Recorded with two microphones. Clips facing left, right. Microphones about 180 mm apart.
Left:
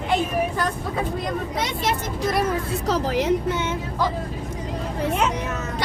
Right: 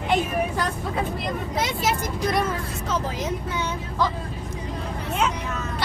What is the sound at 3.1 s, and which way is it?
Speech, 70° left (ahead or behind).